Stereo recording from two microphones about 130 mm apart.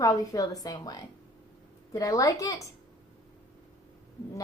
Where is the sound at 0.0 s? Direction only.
25° left (ahead or behind).